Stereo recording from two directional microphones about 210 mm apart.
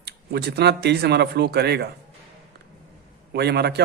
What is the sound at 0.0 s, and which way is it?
A man's voice, 50° right (ahead or behind).